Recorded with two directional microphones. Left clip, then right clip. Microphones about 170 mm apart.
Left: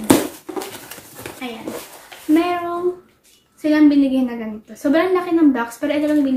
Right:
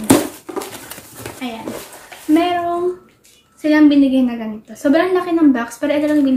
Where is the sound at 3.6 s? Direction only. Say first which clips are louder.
Right 2 dB; 5° right (ahead or behind).